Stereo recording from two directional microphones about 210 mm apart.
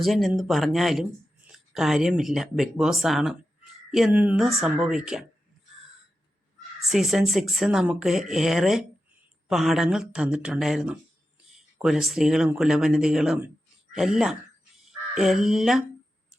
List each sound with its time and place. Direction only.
0.0 s speech: centre (ahead or behind)
6.8 s speech: centre (ahead or behind)